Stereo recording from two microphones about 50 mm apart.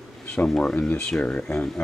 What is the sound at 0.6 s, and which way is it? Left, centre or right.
Speech, left.